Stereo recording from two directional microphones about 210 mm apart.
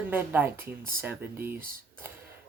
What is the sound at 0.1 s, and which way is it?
Speech, 10° right (ahead or behind).